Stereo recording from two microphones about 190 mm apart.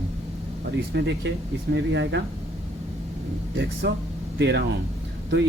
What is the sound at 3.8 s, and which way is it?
Speech, 60° right (ahead or behind).